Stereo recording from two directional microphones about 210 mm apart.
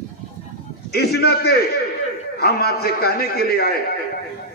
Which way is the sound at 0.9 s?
50° left (ahead or behind).